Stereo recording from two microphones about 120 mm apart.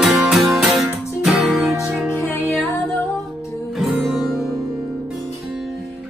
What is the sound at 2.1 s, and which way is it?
Music, 20° left (ahead or behind).